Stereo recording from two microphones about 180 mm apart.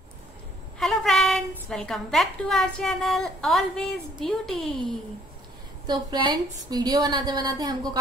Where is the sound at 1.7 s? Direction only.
5° left (ahead or behind).